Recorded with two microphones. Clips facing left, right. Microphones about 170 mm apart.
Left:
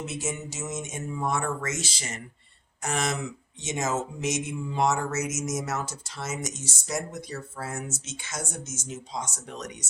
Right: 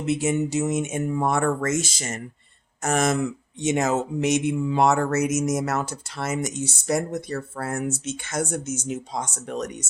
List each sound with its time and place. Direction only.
0.0 s speech: 60° right (ahead or behind)